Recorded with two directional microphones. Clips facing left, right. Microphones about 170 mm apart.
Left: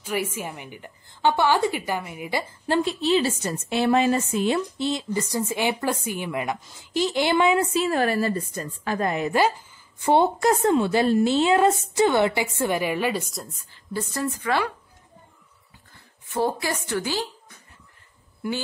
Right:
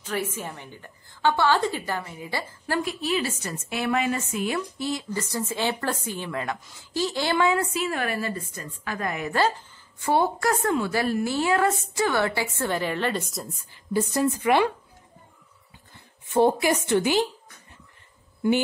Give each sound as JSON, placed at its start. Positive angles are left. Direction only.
{"t": 0.0, "sound": "a woman's voice", "side_deg": 10}
{"t": 13.9, "sound": "a woman's voice", "side_deg": -15}
{"t": 16.3, "sound": "a woman's voice", "side_deg": -20}